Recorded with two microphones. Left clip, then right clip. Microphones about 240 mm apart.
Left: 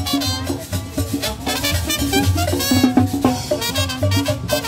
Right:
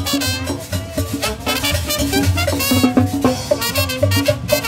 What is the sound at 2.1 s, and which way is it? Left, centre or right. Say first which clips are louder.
Music: even; right.